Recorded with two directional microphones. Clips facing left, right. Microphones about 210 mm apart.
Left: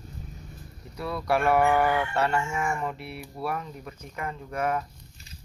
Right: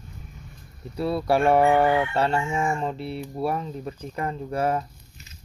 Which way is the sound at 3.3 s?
30° right (ahead or behind).